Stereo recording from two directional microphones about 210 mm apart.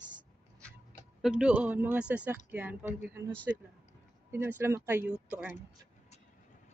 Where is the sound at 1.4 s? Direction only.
5° right (ahead or behind).